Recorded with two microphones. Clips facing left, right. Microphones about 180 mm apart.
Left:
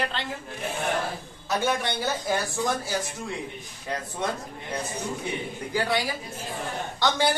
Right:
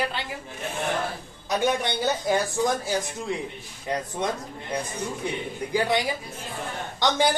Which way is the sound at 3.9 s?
20° right (ahead or behind).